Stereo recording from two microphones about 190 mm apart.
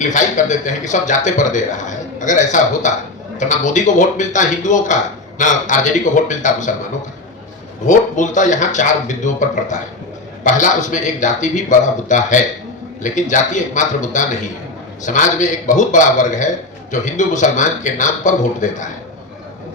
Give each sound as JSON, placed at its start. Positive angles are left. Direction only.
{"t": 0.0, "sound": "a man's voice", "side_deg": 40}
{"t": 7.9, "sound": "a man's voice", "side_deg": 40}